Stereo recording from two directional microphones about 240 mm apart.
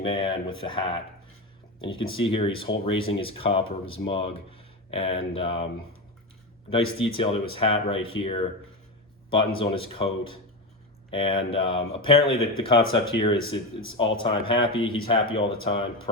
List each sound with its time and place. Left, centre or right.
0.0 s speech: left
6.7 s speech: left
9.6 s speech: left
11.1 s speech: left